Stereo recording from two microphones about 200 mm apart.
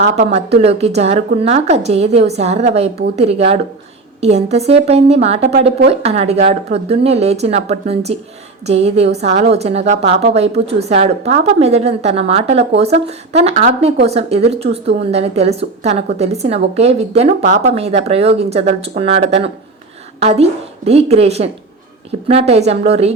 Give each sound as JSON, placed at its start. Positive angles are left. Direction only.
{"t": 0.0, "sound": "speech", "side_deg": -35}